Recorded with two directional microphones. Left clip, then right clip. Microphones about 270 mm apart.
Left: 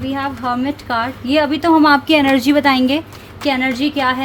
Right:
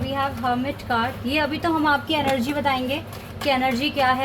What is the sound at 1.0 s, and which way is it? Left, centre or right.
A woman's voice, left.